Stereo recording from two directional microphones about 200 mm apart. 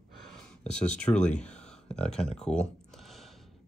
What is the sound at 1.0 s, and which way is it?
Speech, 5° left (ahead or behind).